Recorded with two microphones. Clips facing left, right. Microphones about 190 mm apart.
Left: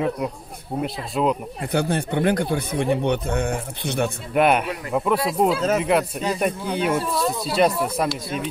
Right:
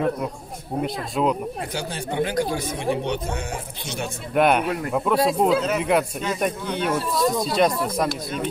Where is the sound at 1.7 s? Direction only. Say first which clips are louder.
Left 11 dB; 55° left (ahead or behind).